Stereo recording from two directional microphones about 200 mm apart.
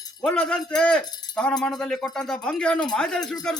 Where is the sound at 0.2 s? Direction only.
5° left (ahead or behind).